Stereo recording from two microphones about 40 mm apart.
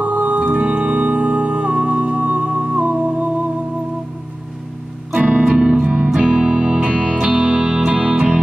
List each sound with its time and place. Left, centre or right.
0.0 s music: right
5.5 s music: right
6.0 s music: centre
6.3 s music: centre
8.0 s music: right